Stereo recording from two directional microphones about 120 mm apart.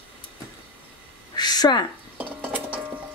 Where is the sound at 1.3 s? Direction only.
35° left (ahead or behind).